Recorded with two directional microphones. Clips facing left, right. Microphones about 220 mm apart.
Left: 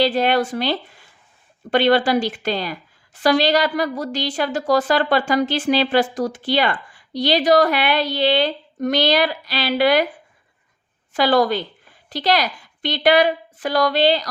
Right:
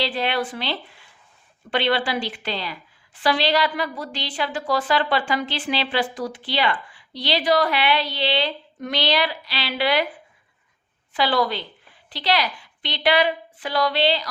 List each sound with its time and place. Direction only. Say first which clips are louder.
0.0 s a woman's voice: left 7 dB; 45° left (ahead or behind)
11.1 s a woman's voice: left 5 dB; 45° left (ahead or behind)